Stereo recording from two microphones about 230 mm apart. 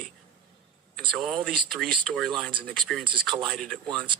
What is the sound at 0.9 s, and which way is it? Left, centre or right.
Speech, centre.